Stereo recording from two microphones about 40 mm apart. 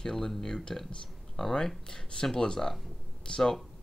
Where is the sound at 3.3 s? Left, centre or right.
Left.